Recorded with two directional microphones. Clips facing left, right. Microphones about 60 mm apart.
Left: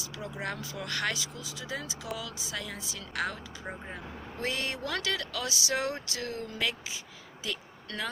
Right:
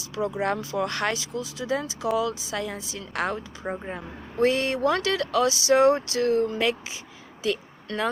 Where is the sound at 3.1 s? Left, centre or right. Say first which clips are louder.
Right 6 dB; right.